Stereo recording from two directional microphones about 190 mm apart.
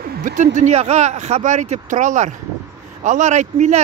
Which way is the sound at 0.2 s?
40° right (ahead or behind).